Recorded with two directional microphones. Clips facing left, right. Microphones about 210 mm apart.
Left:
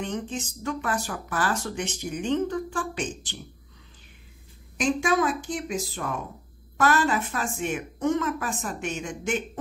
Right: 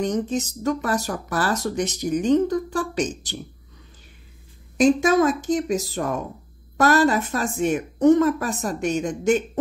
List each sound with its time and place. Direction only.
0.0 s speech: 40° right (ahead or behind)
4.7 s speech: 40° right (ahead or behind)